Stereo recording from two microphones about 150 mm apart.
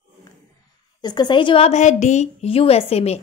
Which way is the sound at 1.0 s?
30° left (ahead or behind).